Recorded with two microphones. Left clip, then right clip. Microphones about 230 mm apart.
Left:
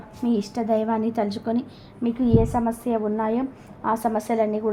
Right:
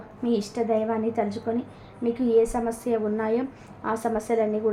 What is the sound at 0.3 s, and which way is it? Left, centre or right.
A woman's voice, centre.